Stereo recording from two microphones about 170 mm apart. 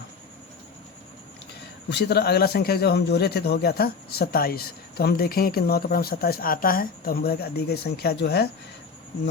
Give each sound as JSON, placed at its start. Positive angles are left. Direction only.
{"t": 1.9, "sound": "a man's voice", "side_deg": 75}